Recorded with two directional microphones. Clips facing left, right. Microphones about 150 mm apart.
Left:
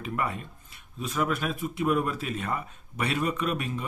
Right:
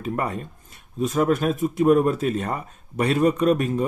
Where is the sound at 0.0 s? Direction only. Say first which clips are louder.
Right 5 dB; 40° right (ahead or behind).